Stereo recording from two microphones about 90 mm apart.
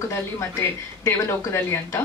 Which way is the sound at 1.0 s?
35° left (ahead or behind).